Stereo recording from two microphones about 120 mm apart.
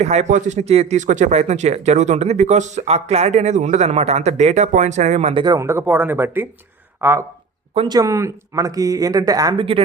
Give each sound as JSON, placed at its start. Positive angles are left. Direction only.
{"t": 0.0, "sound": "speech", "side_deg": -70}
{"t": 5.3, "sound": "speech", "side_deg": -40}
{"t": 5.5, "sound": "speech", "side_deg": -20}
{"t": 9.6, "sound": "speech", "side_deg": -50}